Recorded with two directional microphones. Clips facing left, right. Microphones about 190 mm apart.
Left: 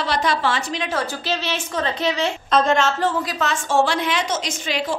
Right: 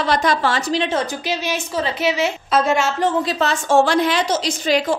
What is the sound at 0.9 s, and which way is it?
A woman's voice, 15° right (ahead or behind).